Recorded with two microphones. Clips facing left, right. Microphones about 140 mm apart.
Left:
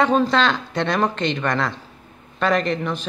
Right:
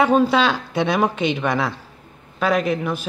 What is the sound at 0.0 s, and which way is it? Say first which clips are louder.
Speech: right 2 dB; 10° right (ahead or behind).